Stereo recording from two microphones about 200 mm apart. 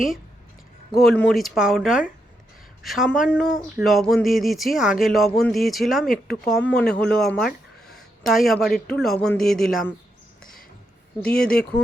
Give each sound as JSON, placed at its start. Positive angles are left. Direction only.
{"t": 0.9, "sound": "speech", "side_deg": 5}
{"t": 11.3, "sound": "speech", "side_deg": 50}